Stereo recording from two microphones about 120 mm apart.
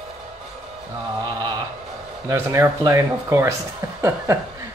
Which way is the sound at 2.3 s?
25° right (ahead or behind).